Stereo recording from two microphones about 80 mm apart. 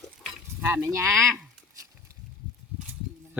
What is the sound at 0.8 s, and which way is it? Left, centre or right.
Speech, right.